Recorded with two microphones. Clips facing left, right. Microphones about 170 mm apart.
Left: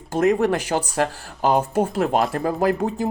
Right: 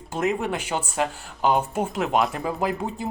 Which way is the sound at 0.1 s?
40° left (ahead or behind).